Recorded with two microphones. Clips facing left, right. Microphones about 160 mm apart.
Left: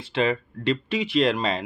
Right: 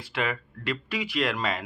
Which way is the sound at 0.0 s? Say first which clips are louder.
Left 7 dB; 25° left (ahead or behind).